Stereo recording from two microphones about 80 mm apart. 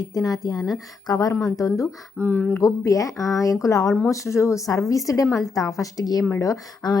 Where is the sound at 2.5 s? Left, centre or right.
Left.